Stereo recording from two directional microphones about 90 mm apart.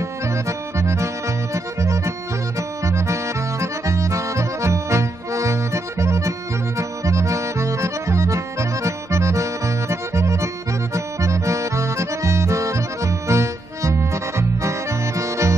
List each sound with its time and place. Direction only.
0.3 s accordion: 35° right (ahead or behind)